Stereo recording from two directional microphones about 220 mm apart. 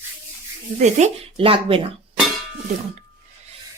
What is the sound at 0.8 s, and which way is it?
Speech, 30° right (ahead or behind).